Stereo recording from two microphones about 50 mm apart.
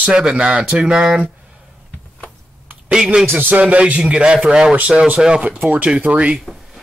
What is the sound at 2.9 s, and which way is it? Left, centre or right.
Speech, centre.